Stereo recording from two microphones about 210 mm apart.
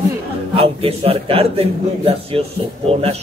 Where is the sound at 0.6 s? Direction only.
25° right (ahead or behind).